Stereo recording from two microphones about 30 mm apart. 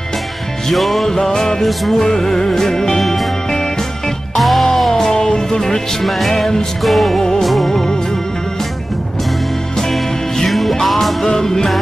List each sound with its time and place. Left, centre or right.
0.7 s music: centre
1.1 s music: centre
1.6 s music: centre
2.0 s music: centre
3.0 s music: centre
4.4 s music: centre
5.1 s music: left
5.9 s music: centre
7.2 s music: centre
9.8 s music: centre
11.2 s music: centre